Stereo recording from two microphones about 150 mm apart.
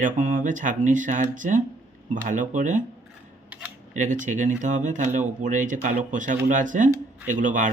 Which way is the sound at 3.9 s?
55° right (ahead or behind).